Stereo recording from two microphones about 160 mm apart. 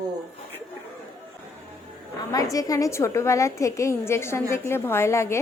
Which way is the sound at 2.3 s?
20° left (ahead or behind).